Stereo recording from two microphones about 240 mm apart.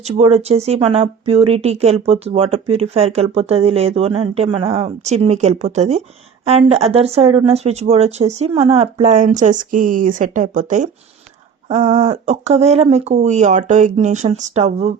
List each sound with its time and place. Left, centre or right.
0.0 s speech: right